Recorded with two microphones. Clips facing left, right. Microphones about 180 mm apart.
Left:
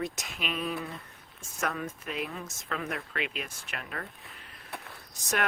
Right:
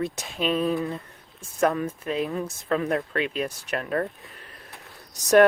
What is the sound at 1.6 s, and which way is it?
Speech, 35° right (ahead or behind).